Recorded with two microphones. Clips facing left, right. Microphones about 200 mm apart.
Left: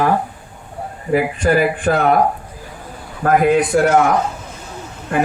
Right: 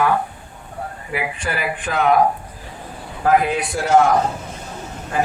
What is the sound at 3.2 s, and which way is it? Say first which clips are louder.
Speech: left 4 dB; 55° left (ahead or behind).